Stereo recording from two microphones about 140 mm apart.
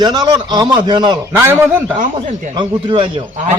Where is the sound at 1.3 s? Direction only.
15° right (ahead or behind).